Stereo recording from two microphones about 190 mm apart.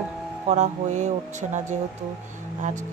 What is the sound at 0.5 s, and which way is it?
Speech, 40° right (ahead or behind).